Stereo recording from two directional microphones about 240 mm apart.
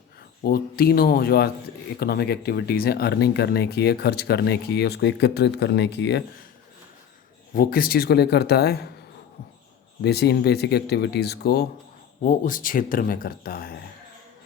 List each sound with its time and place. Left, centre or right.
0.4 s speech: left
7.5 s speech: left
10.0 s speech: left